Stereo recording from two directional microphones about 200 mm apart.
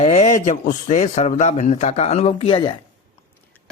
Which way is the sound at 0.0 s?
30° left (ahead or behind).